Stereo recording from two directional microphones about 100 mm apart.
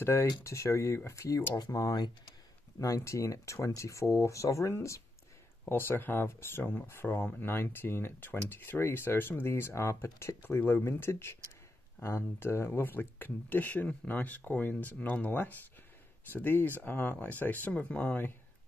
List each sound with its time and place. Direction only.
0.0 s speech: 25° left (ahead or behind)